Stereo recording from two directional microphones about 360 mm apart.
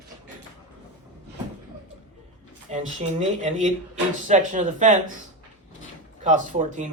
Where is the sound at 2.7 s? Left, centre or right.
Centre.